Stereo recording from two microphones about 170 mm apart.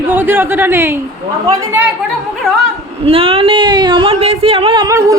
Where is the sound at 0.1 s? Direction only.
10° right (ahead or behind).